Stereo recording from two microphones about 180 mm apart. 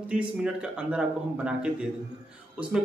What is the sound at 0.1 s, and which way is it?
A man's voice, 5° right (ahead or behind).